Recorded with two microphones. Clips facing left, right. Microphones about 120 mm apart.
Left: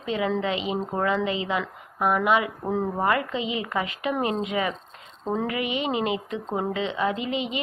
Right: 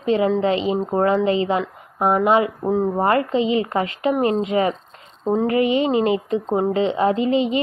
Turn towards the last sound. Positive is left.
turn(degrees=-35)  # may be behind; listen again after turning